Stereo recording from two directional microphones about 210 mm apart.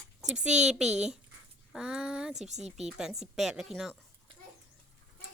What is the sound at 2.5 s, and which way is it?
Speech, 35° right (ahead or behind).